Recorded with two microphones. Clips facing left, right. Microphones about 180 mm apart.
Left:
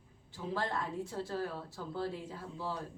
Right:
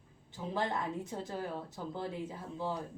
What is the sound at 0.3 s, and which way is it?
A woman's voice, 20° right (ahead or behind).